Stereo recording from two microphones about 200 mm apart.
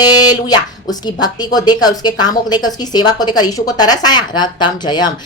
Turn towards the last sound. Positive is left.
turn(degrees=20)  # may be behind; listen again after turning